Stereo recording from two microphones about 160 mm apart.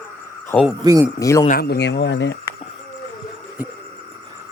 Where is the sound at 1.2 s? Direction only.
20° left (ahead or behind).